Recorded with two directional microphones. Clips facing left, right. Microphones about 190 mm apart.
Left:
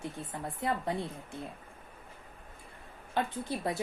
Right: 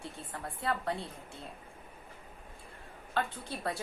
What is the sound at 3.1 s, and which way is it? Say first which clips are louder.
Speech: left 3 dB; 20° left (ahead or behind).